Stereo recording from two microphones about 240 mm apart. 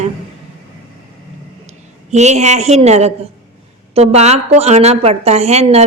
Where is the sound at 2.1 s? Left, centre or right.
Right.